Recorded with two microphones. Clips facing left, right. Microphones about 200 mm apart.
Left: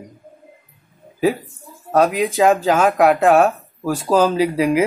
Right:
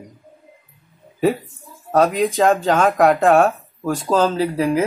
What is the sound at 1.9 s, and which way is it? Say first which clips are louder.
Speech: even; centre (ahead or behind).